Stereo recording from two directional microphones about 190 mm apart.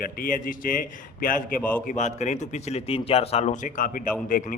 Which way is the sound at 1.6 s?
10° left (ahead or behind).